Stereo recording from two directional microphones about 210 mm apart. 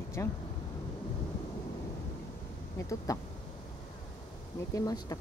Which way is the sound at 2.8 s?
15° left (ahead or behind).